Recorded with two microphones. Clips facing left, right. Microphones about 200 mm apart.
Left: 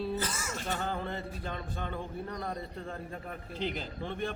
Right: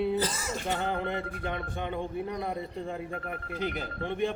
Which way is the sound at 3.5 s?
10° right (ahead or behind).